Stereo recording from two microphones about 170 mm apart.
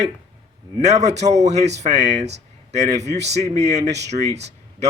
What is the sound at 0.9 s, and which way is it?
A man's voice, 40° right (ahead or behind).